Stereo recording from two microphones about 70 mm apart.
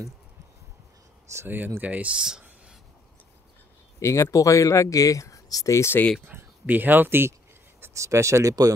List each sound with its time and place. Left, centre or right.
1.3 s speech: right
1.8 s speech: right
4.0 s speech: left
6.2 s speech: right
7.9 s speech: right